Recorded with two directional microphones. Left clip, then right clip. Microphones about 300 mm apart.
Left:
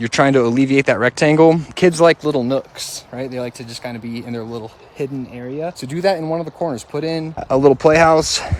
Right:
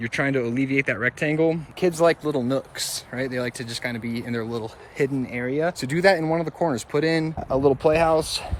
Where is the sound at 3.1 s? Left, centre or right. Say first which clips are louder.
Left 2 dB; centre.